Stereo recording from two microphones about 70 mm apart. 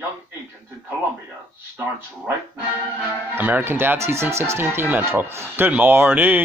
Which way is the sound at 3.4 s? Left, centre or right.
Right.